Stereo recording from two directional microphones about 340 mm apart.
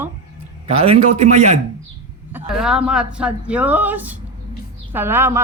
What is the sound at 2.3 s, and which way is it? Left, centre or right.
A woman's voice, centre.